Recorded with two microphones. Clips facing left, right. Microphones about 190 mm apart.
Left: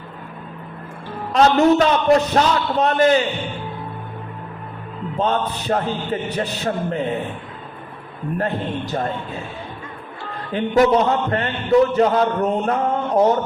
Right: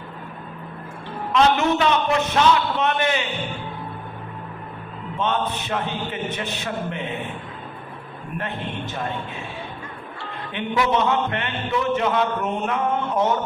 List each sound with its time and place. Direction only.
1.3 s a man's voice: 40° left (ahead or behind)
5.1 s a man's voice: 35° left (ahead or behind)
8.4 s a man's voice: 35° left (ahead or behind)
10.5 s a man's voice: 40° left (ahead or behind)